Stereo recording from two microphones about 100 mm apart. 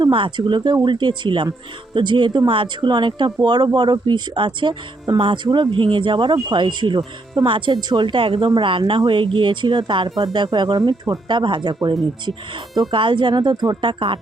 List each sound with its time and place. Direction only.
0.0 s speech: 50° right (ahead or behind)